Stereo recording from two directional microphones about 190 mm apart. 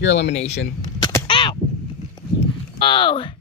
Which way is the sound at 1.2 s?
25° left (ahead or behind).